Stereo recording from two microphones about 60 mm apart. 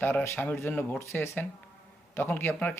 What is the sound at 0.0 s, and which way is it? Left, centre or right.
Speech, left.